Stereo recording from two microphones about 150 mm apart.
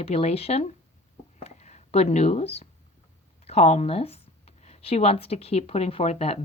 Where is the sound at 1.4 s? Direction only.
50° left (ahead or behind).